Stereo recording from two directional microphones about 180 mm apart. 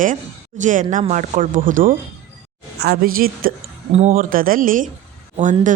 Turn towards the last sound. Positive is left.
turn(degrees=-45)  # may be behind; listen again after turning